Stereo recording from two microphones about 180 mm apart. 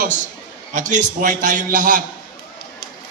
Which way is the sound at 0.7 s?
45° right (ahead or behind).